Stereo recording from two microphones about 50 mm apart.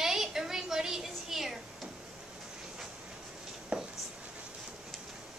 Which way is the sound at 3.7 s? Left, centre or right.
Right.